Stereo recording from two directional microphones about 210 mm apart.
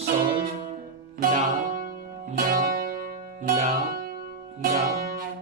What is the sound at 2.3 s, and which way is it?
Music, 40° right (ahead or behind).